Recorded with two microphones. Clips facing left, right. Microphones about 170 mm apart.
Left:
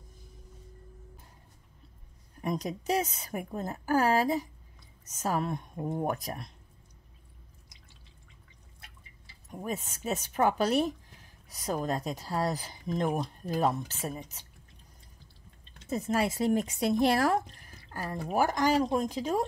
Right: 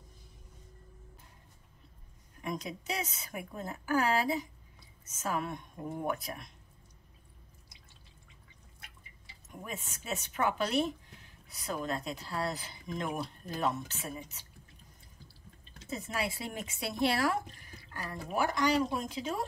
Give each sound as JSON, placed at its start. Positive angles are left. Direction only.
{"t": 2.4, "sound": "speech", "side_deg": 40}
{"t": 9.6, "sound": "speech", "side_deg": 40}
{"t": 16.1, "sound": "speech", "side_deg": 45}